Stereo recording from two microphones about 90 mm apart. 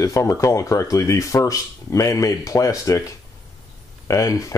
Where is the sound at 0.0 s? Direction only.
40° left (ahead or behind).